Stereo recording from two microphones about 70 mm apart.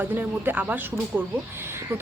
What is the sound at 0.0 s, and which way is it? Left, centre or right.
Speech, right.